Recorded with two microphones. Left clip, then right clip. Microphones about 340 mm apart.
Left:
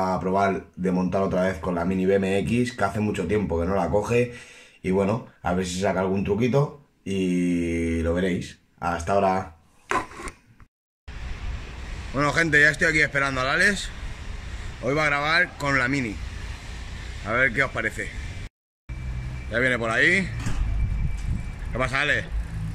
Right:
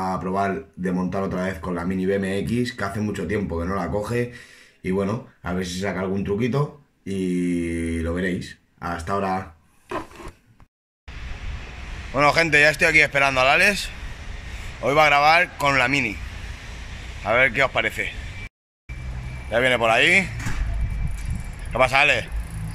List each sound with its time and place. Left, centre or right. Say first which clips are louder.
0.0 s speech: left 1 dB; centre
12.2 s speech: right 3 dB; centre
17.2 s speech: right 4 dB; centre
17.8 s speech: right 4 dB; right
19.5 s speech: right 5 dB; centre
21.7 s speech: right 6 dB; centre